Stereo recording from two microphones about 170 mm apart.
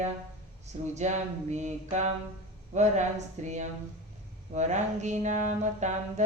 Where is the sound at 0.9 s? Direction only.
45° right (ahead or behind).